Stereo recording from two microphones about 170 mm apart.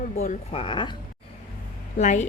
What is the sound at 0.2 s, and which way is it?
Speech, 40° left (ahead or behind).